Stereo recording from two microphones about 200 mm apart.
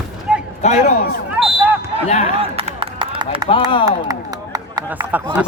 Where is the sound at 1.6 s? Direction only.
10° right (ahead or behind).